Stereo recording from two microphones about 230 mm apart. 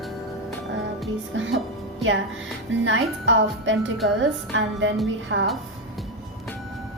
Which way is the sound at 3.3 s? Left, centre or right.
Right.